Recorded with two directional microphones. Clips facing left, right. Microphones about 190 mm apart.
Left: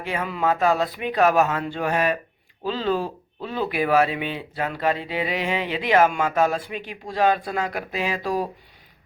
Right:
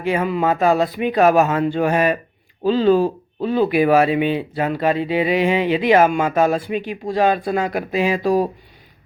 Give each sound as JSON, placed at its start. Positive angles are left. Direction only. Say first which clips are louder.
{"t": 0.3, "sound": "speech", "louder": "right 2 dB", "side_deg": -10}
{"t": 8.2, "sound": "speech", "louder": "right 8 dB", "side_deg": -25}